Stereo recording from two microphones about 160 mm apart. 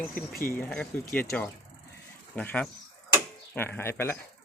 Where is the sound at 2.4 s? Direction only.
5° left (ahead or behind).